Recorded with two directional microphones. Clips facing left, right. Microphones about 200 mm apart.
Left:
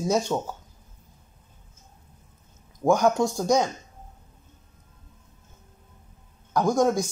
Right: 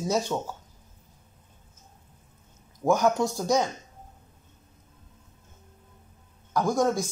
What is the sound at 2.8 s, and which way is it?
Speech, 15° left (ahead or behind).